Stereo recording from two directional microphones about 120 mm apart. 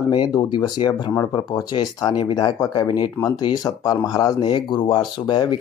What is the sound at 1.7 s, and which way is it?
Speech, 40° left (ahead or behind).